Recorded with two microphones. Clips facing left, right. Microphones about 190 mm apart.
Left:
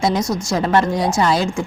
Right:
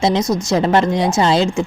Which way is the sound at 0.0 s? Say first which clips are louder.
Right 3 dB; 20° right (ahead or behind).